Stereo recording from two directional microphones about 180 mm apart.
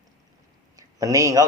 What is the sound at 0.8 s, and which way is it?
Speech, 20° right (ahead or behind).